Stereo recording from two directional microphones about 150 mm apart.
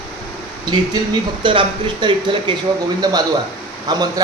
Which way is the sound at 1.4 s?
35° right (ahead or behind).